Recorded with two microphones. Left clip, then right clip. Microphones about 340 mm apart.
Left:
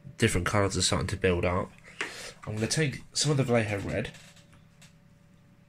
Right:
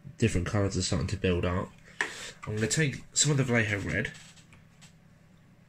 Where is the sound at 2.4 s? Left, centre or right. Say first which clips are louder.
Even; left.